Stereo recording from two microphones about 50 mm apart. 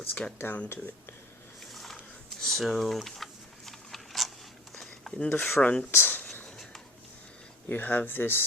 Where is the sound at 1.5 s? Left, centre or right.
Centre.